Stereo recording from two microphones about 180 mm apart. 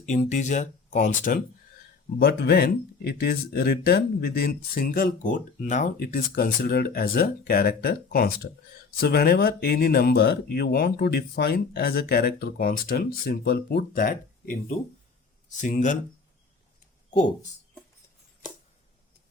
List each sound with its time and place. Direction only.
0.0 s speech: 40° left (ahead or behind)
2.1 s speech: 65° left (ahead or behind); by 16.0 s 45° left (ahead or behind)